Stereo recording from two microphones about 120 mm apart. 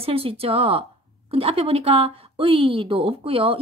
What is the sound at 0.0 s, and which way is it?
Speech, 50° right (ahead or behind).